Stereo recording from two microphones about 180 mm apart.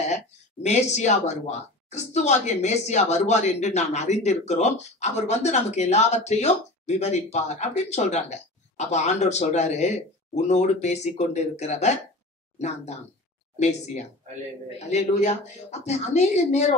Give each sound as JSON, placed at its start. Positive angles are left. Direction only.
{"t": 0.1, "sound": "speech", "side_deg": 40}